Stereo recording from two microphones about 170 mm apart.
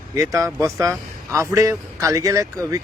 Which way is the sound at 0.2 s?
20° right (ahead or behind).